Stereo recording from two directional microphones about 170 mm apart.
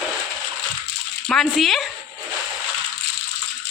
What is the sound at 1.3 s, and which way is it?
Speech, centre (ahead or behind).